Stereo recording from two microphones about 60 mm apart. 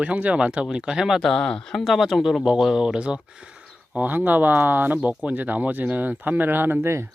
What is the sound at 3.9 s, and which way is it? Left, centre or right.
Speech, right.